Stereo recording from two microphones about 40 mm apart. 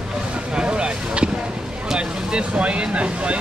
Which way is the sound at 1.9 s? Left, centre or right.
Right.